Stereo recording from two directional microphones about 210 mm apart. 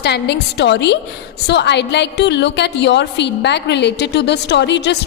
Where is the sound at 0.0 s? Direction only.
50° left (ahead or behind).